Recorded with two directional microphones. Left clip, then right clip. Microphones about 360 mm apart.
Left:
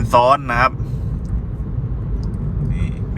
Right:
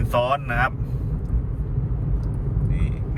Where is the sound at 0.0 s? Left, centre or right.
Centre.